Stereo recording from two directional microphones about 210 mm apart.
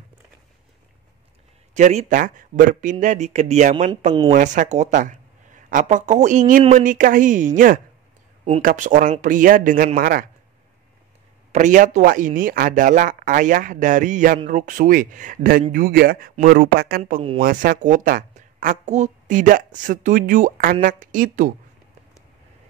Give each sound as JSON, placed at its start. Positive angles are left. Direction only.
{"t": 1.7, "sound": "speech", "side_deg": -35}
{"t": 11.5, "sound": "a man's voice", "side_deg": -35}
{"t": 17.0, "sound": "speech", "side_deg": -30}
{"t": 17.4, "sound": "speech", "side_deg": -40}